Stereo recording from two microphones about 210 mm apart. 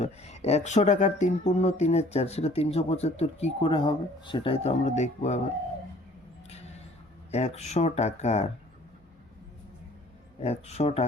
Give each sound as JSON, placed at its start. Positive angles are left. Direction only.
{"t": 0.0, "sound": "speech", "side_deg": 30}
{"t": 7.3, "sound": "speech", "side_deg": 30}
{"t": 10.4, "sound": "speech", "side_deg": 30}